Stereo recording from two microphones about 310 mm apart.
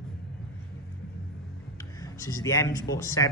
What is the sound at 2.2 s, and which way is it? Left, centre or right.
A man's voice, centre.